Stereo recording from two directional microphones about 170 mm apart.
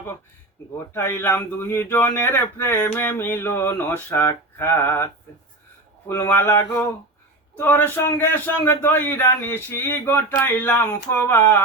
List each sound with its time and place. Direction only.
0.9 s speech: 15° left (ahead or behind)
6.1 s speech: 15° left (ahead or behind)